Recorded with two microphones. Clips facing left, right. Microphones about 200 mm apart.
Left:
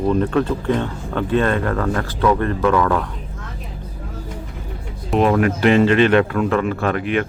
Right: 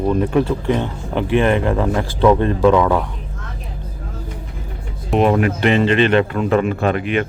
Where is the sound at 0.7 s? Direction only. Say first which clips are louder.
Right 1 dB; 20° right (ahead or behind).